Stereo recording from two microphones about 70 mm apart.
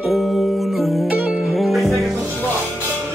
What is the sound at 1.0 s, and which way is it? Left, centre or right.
Music, right.